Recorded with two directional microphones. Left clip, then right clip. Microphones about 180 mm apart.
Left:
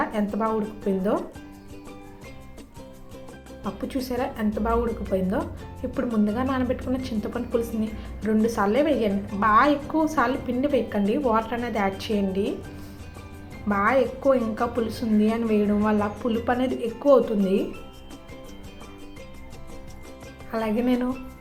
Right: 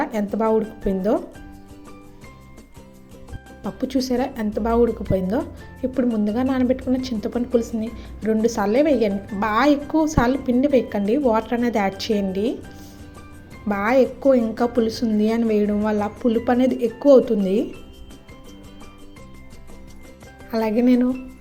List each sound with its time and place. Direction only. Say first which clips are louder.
0.0 s a woman's voice: right 3 dB; 40° right (ahead or behind)
3.6 s a woman's voice: right 6 dB; 40° right (ahead or behind)
13.7 s a woman's voice: right 3 dB; 40° right (ahead or behind)
20.5 s a woman's voice: right 5 dB; 40° right (ahead or behind)